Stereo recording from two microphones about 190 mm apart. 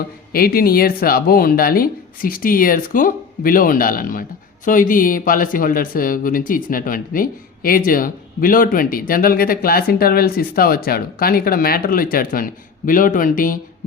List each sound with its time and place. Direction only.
0.3 s speech: 50° left (ahead or behind)